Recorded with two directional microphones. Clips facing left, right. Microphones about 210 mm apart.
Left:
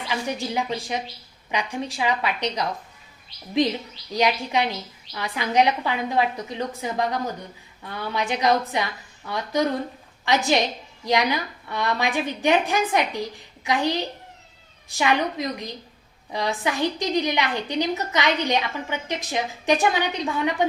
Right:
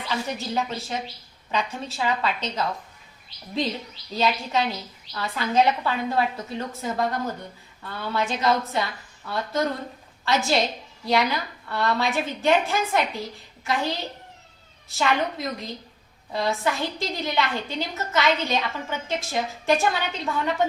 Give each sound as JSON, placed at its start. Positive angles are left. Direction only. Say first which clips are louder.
{"t": 0.1, "sound": "a woman's voice", "louder": "left 1 dB", "side_deg": 15}
{"t": 4.1, "sound": "a woman's voice", "louder": "left 2 dB", "side_deg": 15}